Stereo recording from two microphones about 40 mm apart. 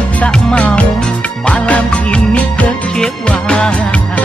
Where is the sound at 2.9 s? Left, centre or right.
Centre.